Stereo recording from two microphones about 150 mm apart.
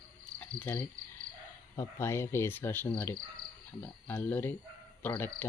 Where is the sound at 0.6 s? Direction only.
15° left (ahead or behind).